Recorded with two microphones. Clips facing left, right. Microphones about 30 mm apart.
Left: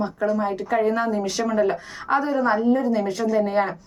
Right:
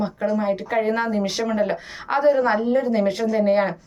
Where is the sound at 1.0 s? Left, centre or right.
Right.